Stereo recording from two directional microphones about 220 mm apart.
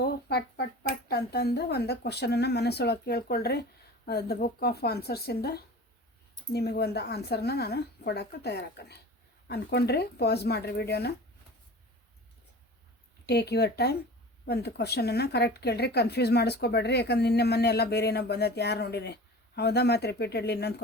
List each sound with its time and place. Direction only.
0.0 s speech: 45° left (ahead or behind)
13.2 s speech: 50° left (ahead or behind)